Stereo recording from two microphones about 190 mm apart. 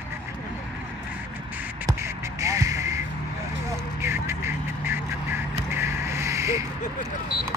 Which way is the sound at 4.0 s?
15° right (ahead or behind).